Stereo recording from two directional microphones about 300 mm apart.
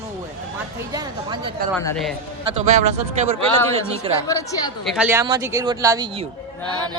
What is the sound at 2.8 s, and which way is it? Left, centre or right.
A man's voice, right.